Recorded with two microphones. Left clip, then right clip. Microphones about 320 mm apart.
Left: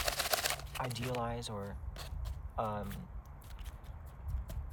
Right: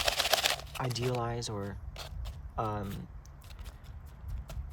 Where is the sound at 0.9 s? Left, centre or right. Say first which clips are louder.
Right 6 dB; right.